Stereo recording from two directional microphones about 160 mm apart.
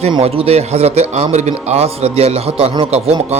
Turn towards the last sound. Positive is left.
turn(degrees=-40)  # may be behind; listen again after turning